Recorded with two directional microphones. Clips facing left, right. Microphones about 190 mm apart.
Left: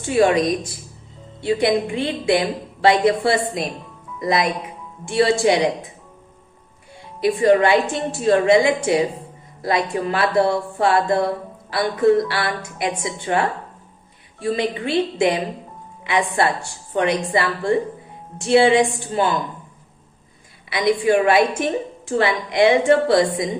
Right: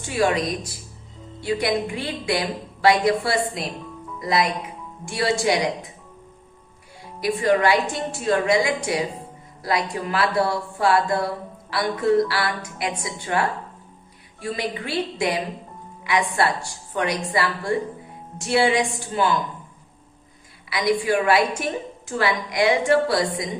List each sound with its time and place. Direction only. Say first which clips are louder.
0.1 s a woman's voice: left 5 dB; 25° left (ahead or behind)
7.2 s a woman's voice: left 5 dB; 25° left (ahead or behind)
20.7 s a woman's voice: left 4 dB; 25° left (ahead or behind)